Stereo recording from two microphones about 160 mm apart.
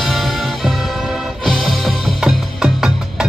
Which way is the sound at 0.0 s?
Centre (ahead or behind).